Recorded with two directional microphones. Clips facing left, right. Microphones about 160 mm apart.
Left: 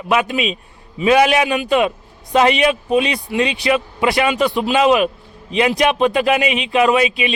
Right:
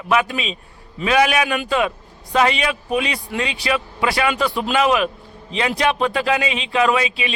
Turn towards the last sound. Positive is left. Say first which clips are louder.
# left 4 dB
turn(degrees=20)  # may be behind; listen again after turning